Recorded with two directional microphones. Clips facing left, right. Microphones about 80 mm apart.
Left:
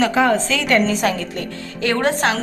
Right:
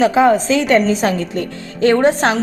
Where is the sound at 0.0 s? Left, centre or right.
Centre.